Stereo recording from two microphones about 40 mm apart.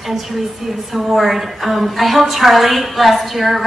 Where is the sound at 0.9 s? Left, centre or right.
Centre.